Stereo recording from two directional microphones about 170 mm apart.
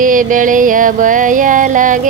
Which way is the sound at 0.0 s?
50° right (ahead or behind).